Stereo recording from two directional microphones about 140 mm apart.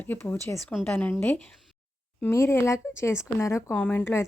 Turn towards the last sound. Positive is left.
turn(degrees=15)  # may be behind; listen again after turning